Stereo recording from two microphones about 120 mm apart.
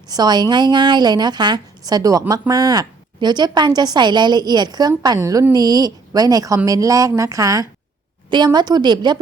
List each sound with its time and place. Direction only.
0.1 s a woman's voice: 35° right (ahead or behind)